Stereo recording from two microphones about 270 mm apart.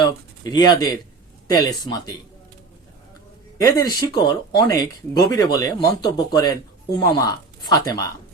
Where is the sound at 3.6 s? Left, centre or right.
Centre.